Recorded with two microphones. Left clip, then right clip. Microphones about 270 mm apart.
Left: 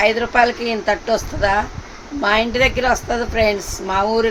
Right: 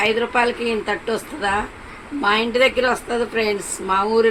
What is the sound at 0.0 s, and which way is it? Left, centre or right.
A woman's voice, left.